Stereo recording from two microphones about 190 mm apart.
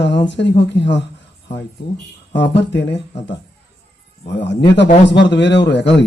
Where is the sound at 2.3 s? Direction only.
70° left (ahead or behind).